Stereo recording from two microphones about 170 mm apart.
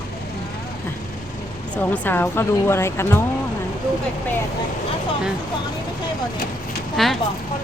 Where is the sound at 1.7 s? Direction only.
10° left (ahead or behind).